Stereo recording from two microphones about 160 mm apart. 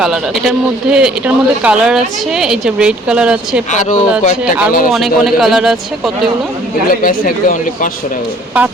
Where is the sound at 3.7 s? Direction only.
50° left (ahead or behind).